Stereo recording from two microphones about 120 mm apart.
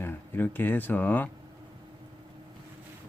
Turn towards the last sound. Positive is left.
turn(degrees=15)  # may be behind; listen again after turning